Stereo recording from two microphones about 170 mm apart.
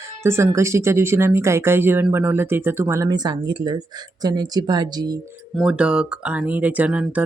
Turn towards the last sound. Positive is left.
turn(degrees=-10)  # may be behind; listen again after turning